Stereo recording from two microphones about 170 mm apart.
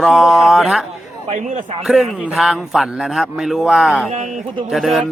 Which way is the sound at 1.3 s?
45° right (ahead or behind).